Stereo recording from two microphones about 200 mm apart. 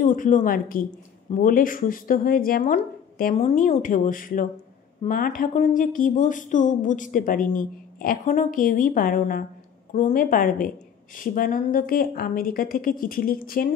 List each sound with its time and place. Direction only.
0.0 s speech: 40° left (ahead or behind)